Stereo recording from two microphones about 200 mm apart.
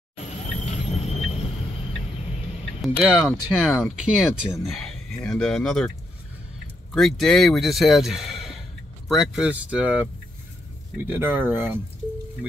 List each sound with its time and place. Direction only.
0.7 s vehicle: 30° left (ahead or behind)
2.8 s speech: centre (ahead or behind)
6.9 s speech: centre (ahead or behind)